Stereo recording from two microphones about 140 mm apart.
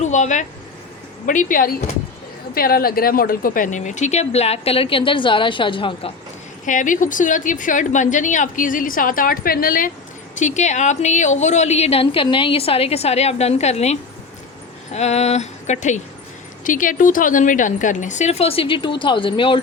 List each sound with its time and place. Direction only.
0.0 s a woman's voice: 60° left (ahead or behind); by 6.1 s 40° left (ahead or behind)
6.7 s a woman's voice: 65° left (ahead or behind); by 9.9 s 85° left
10.3 s a woman's voice: 60° left (ahead or behind)
16.6 s speech: 70° left (ahead or behind); by 19.6 s 35° left (ahead or behind)